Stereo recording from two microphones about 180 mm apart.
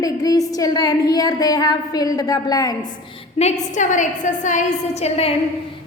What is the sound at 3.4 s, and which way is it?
A woman's voice, 40° left (ahead or behind).